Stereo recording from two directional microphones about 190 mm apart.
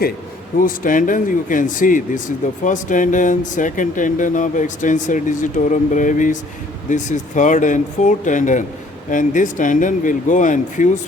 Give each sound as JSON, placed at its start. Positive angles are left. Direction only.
{"t": 0.6, "sound": "speech", "side_deg": 45}